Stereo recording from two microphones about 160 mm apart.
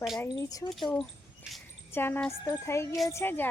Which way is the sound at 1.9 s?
15° left (ahead or behind).